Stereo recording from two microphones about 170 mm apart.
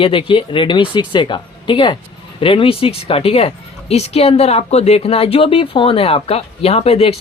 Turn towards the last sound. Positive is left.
turn(degrees=35)  # may be behind; listen again after turning